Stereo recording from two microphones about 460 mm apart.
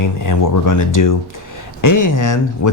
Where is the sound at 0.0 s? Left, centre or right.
Left.